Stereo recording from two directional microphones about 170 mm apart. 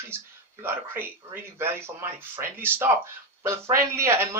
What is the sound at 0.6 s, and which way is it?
Speech, 10° right (ahead or behind).